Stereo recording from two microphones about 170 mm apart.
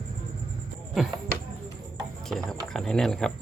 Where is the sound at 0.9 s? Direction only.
Centre (ahead or behind).